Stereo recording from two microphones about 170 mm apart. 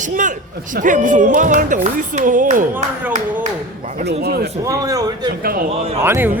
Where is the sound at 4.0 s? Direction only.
80° right.